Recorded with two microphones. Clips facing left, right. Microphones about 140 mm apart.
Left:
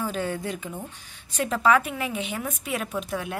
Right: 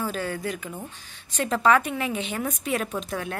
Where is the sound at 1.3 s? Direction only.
10° left (ahead or behind).